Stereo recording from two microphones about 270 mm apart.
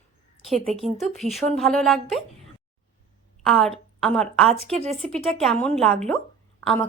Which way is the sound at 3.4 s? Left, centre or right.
Centre.